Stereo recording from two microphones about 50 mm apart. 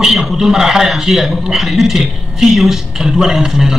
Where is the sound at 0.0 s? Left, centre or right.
Centre.